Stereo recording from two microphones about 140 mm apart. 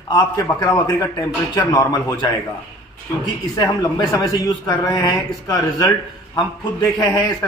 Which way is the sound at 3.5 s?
25° left (ahead or behind).